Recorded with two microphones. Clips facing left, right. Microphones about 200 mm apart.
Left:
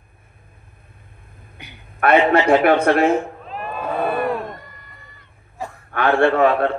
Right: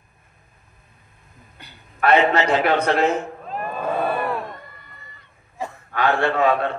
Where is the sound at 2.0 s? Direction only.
55° left (ahead or behind).